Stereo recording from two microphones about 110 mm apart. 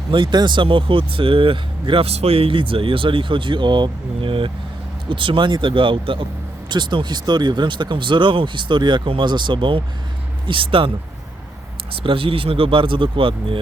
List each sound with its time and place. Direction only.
0.1 s speech: 45° right (ahead or behind)